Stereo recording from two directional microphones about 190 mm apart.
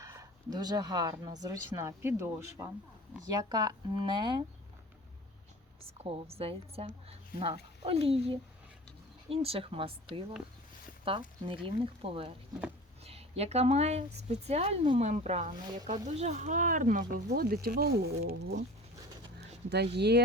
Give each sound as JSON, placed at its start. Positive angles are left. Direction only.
{"t": 0.0, "sound": "speech", "side_deg": -15}
{"t": 5.8, "sound": "speech", "side_deg": -30}
{"t": 20.0, "sound": "speech", "side_deg": -60}